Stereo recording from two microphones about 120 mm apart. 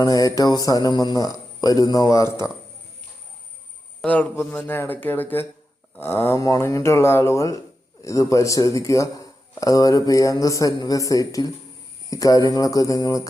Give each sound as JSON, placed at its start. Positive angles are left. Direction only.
{"t": 0.0, "sound": "speech", "side_deg": 30}
{"t": 4.0, "sound": "a man's voice", "side_deg": 15}